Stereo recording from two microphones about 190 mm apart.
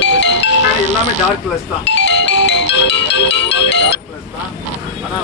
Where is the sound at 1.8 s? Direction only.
70° left (ahead or behind).